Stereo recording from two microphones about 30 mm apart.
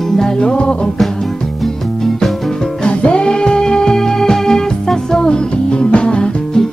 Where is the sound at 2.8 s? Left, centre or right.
Left.